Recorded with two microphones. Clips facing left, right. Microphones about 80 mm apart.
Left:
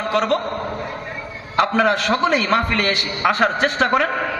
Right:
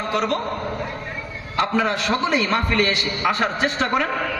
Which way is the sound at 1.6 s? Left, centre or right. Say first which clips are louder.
Left 4 dB; left.